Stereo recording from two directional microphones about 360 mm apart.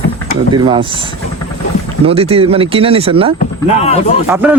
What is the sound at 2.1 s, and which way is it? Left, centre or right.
A man's voice, centre.